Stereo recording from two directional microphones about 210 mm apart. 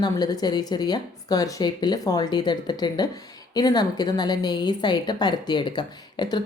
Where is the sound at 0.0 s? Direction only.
20° left (ahead or behind).